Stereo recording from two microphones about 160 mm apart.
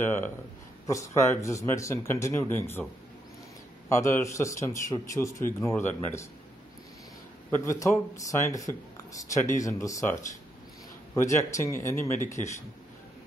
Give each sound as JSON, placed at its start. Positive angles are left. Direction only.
{"t": 0.0, "sound": "speech", "side_deg": 15}
{"t": 3.9, "sound": "speech", "side_deg": 15}
{"t": 7.5, "sound": "speech", "side_deg": 15}
{"t": 11.1, "sound": "speech", "side_deg": 20}